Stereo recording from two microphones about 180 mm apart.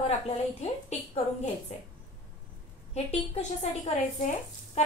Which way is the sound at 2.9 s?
40° left (ahead or behind).